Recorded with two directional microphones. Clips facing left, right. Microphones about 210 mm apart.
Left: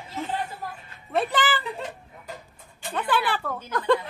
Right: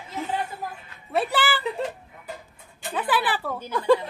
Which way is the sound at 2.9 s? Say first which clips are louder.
Even; 5° right (ahead or behind).